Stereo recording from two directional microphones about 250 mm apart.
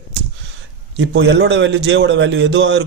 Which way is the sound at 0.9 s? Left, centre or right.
Right.